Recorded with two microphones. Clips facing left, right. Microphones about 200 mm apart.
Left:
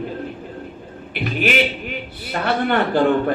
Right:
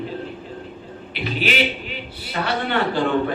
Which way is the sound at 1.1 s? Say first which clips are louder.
Left 3 dB; 50° left (ahead or behind).